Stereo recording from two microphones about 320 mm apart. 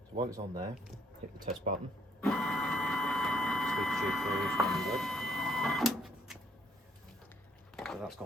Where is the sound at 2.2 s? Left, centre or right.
Centre.